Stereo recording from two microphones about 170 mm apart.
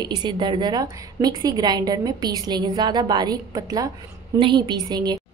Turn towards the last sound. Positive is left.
turn(degrees=-25)  # may be behind; listen again after turning